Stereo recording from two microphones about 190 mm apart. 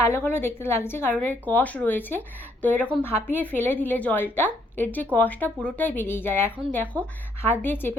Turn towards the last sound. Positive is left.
turn(degrees=10)  # may be behind; listen again after turning